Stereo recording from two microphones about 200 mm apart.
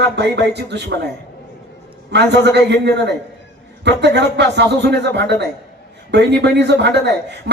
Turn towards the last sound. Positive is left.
turn(degrees=-55)  # may be behind; listen again after turning